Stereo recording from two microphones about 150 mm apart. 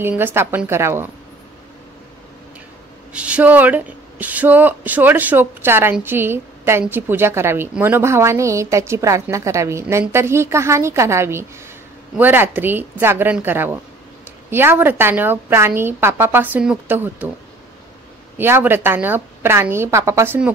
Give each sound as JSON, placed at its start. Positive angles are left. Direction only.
{"t": 0.0, "sound": "a woman's voice", "side_deg": -15}
{"t": 3.1, "sound": "a woman's voice", "side_deg": -10}
{"t": 18.4, "sound": "a woman's voice", "side_deg": -15}